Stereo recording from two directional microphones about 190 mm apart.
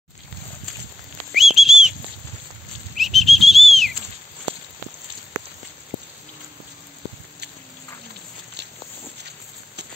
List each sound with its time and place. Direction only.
1.3 s whistle: centre (ahead or behind)
3.0 s bird flight: centre (ahead or behind)